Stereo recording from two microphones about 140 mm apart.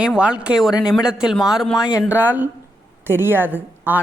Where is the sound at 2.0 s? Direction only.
10° right (ahead or behind).